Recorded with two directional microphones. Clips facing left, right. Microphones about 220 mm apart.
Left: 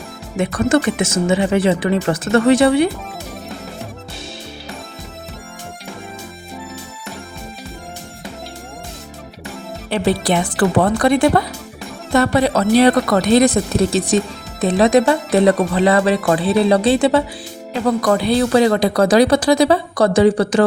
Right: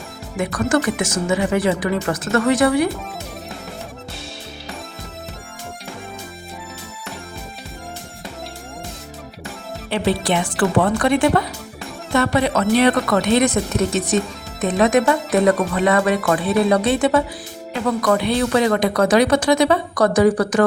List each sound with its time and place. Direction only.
0.3 s speech: 25° left (ahead or behind)
9.9 s speech: 40° left (ahead or behind)